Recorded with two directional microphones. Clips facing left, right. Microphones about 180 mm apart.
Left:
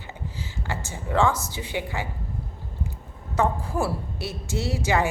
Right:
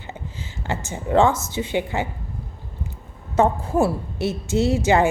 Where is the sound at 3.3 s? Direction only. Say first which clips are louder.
Right 6 dB; 20° right (ahead or behind).